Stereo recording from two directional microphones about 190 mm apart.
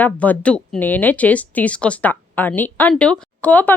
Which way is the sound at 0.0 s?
10° left (ahead or behind).